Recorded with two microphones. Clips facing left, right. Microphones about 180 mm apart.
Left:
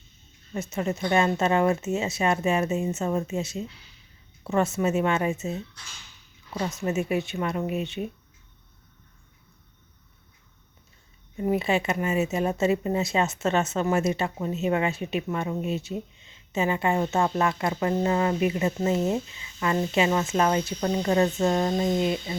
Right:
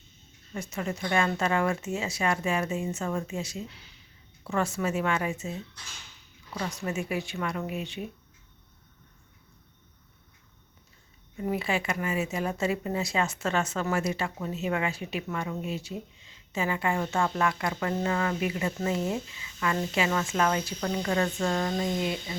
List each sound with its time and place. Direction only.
0.5 s a woman's voice: 25° left (ahead or behind)
11.3 s a woman's voice: 25° left (ahead or behind)